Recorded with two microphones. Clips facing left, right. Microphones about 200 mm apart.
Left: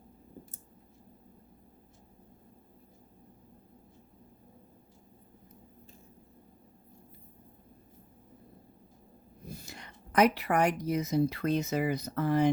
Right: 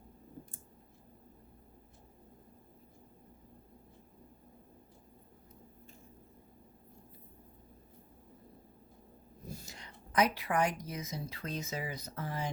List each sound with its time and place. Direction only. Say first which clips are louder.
9.5 s a woman's voice: left 2 dB; 65° left (ahead or behind)